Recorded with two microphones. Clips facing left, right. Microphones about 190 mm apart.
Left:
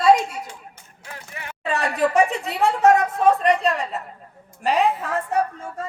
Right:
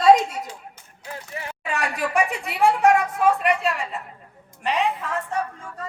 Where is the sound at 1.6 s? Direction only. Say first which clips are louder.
Left 6 dB; 35° left (ahead or behind).